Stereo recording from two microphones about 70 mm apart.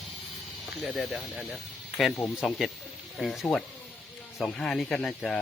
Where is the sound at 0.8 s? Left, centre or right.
Centre.